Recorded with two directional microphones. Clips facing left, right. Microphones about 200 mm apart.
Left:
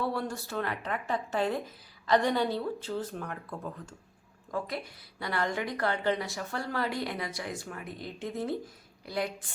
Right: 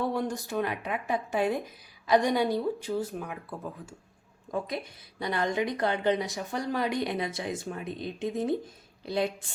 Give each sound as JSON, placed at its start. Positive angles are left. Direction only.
{"t": 0.0, "sound": "speech", "side_deg": -15}
{"t": 4.5, "sound": "speech", "side_deg": -20}